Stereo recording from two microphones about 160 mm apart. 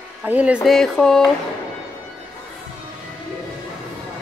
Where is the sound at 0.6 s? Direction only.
5° left (ahead or behind).